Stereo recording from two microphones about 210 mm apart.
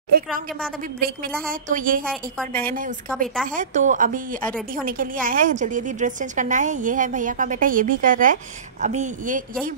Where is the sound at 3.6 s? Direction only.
35° right (ahead or behind).